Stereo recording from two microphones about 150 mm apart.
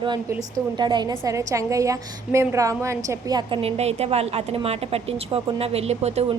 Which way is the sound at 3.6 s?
45° right (ahead or behind).